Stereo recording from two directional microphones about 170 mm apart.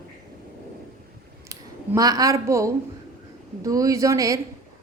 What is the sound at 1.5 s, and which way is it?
A woman's voice, 20° right (ahead or behind).